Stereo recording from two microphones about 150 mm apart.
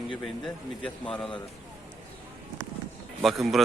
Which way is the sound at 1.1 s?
5° left (ahead or behind).